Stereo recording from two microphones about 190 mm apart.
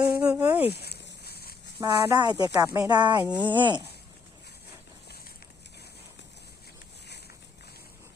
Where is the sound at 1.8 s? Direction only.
20° right (ahead or behind).